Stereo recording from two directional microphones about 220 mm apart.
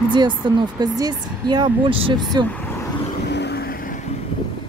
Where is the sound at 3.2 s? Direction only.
50° left (ahead or behind).